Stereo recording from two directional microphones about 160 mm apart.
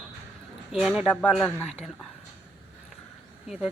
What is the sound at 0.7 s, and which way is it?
Speech, 5° right (ahead or behind).